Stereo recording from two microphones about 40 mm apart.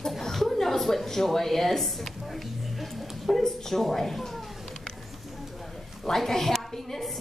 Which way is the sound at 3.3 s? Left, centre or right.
Centre.